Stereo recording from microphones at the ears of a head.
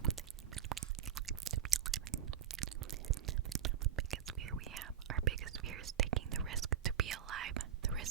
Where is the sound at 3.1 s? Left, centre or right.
Right.